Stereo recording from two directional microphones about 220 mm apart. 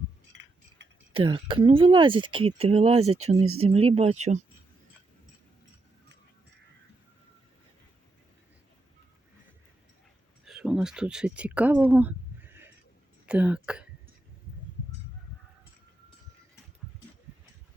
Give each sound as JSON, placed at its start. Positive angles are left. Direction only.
{"t": 0.3, "sound": "chink", "side_deg": -55}
{"t": 1.1, "sound": "speech", "side_deg": -20}
{"t": 10.4, "sound": "speech", "side_deg": 0}